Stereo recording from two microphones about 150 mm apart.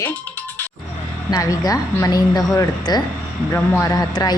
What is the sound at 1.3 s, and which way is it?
Speech, 25° left (ahead or behind).